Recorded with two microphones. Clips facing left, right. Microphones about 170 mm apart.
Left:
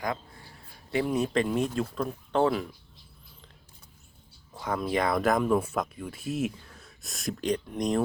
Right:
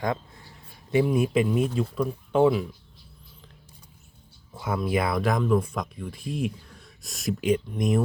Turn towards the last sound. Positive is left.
turn(degrees=-5)  # may be behind; listen again after turning